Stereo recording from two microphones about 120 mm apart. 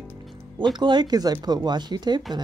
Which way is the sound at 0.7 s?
40° right (ahead or behind).